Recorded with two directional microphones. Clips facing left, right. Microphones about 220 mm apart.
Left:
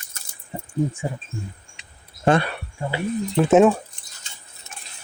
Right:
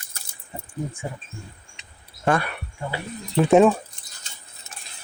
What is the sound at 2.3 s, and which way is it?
Speech, 25° left (ahead or behind).